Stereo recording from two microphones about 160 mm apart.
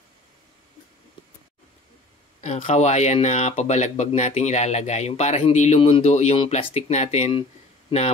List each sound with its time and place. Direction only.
2.4 s speech: 45° left (ahead or behind)